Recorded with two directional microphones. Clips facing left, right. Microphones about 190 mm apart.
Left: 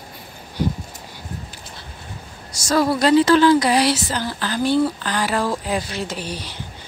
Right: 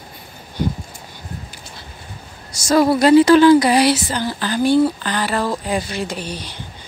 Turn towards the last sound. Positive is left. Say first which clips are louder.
# right 2 dB
turn(degrees=5)  # may be behind; listen again after turning